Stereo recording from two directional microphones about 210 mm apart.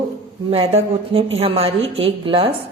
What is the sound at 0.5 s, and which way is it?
A woman's voice, 30° right (ahead or behind).